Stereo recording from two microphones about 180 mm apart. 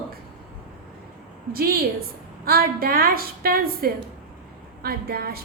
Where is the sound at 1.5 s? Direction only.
55° right (ahead or behind).